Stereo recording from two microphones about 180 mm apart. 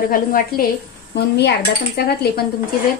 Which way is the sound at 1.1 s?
65° left (ahead or behind).